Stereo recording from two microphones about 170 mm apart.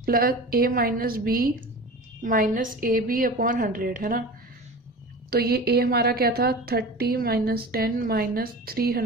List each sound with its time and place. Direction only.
0.0 s a woman's voice: 60° right (ahead or behind)
5.3 s a woman's voice: 65° right (ahead or behind)